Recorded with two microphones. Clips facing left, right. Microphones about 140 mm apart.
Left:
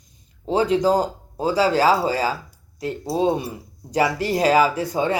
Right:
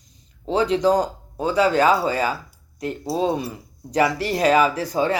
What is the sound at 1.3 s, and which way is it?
Speech, 30° left (ahead or behind).